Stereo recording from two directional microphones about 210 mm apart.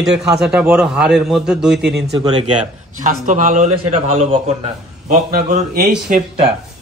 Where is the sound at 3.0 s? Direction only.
35° right (ahead or behind).